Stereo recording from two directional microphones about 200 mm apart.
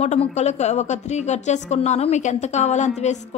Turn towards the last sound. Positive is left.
turn(degrees=35)  # may be behind; listen again after turning